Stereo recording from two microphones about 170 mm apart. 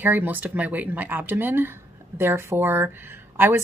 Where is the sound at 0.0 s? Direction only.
10° right (ahead or behind).